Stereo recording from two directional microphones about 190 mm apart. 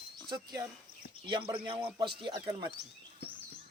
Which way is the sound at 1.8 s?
25° right (ahead or behind).